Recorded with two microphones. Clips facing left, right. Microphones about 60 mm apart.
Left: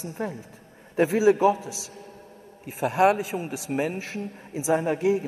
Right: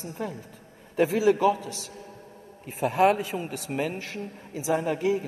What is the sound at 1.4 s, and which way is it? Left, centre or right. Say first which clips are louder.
Speech: left 2 dB; right.